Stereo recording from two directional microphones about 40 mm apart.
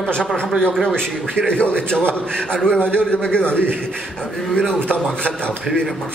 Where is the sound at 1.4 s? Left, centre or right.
Left.